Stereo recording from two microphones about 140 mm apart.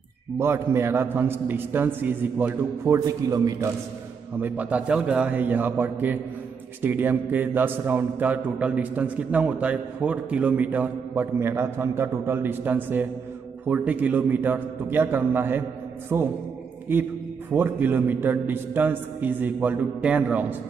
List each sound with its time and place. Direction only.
0.4 s a man's voice: 15° right (ahead or behind)
4.4 s a man's voice: 10° right (ahead or behind)
17.5 s a man's voice: 15° right (ahead or behind)